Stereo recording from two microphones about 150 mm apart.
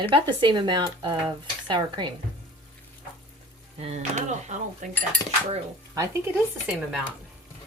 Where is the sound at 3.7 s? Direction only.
45° right (ahead or behind).